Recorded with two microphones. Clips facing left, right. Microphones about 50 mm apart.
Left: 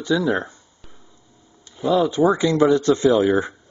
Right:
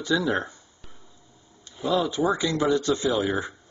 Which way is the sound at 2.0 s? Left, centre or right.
Left.